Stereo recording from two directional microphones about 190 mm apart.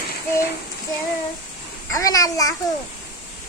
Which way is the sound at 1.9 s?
20° left (ahead or behind).